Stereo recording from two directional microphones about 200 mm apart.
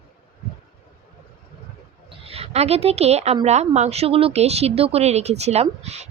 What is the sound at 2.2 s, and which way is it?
A woman's voice, 30° right (ahead or behind).